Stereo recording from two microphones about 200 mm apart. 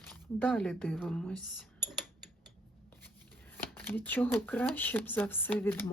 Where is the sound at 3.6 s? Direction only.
10° left (ahead or behind).